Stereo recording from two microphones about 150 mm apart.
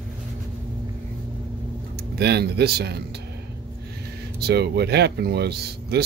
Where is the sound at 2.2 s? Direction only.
90° right.